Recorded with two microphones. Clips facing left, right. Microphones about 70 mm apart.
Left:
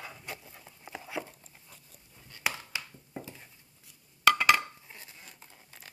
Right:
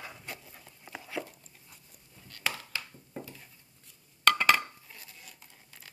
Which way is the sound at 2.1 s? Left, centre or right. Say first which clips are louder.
Left 1 dB; centre.